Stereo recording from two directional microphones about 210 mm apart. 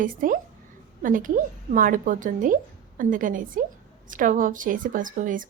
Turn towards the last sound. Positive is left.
turn(degrees=-40)  # may be behind; listen again after turning